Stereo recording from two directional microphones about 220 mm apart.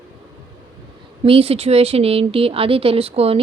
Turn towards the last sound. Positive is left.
turn(degrees=-25)  # may be behind; listen again after turning